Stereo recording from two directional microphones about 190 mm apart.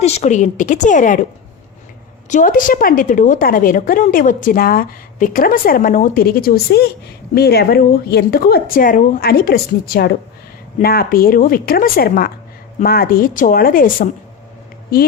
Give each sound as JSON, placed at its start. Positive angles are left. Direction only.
{"t": 0.0, "sound": "a woman's voice", "side_deg": 35}
{"t": 2.3, "sound": "a woman's voice", "side_deg": 45}